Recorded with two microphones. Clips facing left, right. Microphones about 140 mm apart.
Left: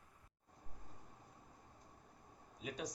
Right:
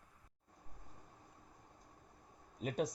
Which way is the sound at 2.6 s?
55° right (ahead or behind).